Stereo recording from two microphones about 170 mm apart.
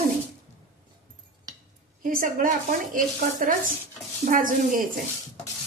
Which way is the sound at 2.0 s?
55° right (ahead or behind).